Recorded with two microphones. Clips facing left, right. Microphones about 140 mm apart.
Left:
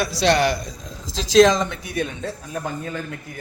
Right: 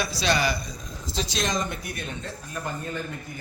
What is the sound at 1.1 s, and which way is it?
Speech, 90° left.